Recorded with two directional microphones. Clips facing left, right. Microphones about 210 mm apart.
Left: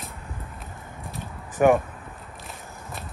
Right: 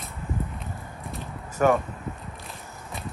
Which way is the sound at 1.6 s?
15° left (ahead or behind).